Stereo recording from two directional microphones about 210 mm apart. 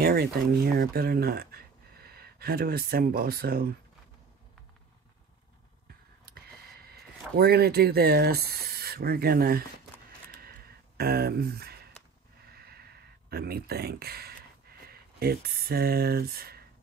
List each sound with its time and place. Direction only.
0.0 s speech: 45° right (ahead or behind)
6.7 s speech: 50° right (ahead or behind)
10.4 s a sound: 45° right (ahead or behind)
14.9 s speech: 45° right (ahead or behind)